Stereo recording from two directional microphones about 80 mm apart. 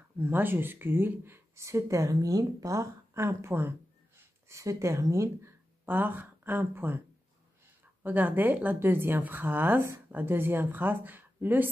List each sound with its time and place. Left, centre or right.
0.2 s speech: right
5.9 s speech: right
8.0 s speech: right